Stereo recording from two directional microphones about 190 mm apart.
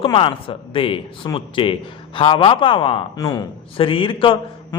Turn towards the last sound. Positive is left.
turn(degrees=25)  # may be behind; listen again after turning